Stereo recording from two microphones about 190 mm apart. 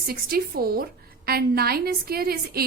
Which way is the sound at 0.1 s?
50° right (ahead or behind).